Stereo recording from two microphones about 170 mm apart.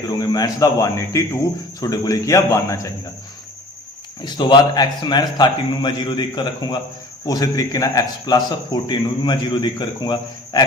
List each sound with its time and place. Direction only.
0.1 s a man's voice: 20° left (ahead or behind)
4.2 s a man's voice: 25° left (ahead or behind)